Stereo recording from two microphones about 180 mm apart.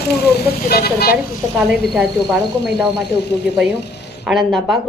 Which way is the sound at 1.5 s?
5° right (ahead or behind).